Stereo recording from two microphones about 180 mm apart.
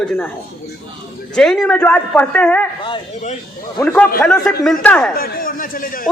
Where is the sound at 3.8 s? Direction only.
10° left (ahead or behind).